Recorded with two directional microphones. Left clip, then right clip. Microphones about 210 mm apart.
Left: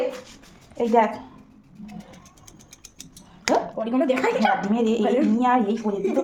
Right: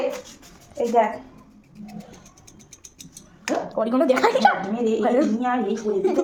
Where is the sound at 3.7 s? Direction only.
20° right (ahead or behind).